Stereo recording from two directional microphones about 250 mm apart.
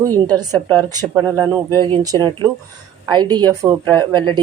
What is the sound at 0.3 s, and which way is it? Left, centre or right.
A woman's voice, centre.